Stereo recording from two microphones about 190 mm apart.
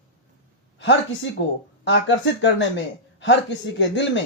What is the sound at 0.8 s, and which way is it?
Speech, 75° left (ahead or behind).